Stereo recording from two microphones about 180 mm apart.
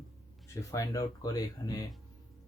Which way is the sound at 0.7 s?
20° left (ahead or behind).